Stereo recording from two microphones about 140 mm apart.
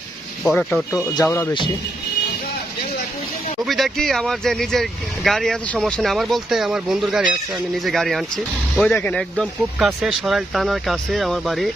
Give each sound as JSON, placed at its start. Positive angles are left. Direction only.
{"t": 0.4, "sound": "speech", "side_deg": 0}
{"t": 1.2, "sound": "speech", "side_deg": 20}
{"t": 3.6, "sound": "speech", "side_deg": 0}
{"t": 8.9, "sound": "speech", "side_deg": 10}
{"t": 9.4, "sound": "speech", "side_deg": 0}